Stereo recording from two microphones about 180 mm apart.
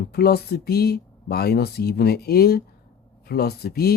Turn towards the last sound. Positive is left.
turn(degrees=60)  # may be behind; listen again after turning